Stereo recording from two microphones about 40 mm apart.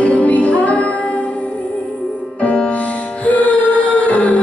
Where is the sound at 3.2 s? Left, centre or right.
Left.